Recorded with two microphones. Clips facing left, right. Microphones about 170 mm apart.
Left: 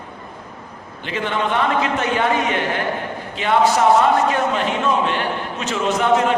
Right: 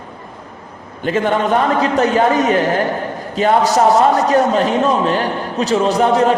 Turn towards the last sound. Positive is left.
turn(degrees=-35)  # may be behind; listen again after turning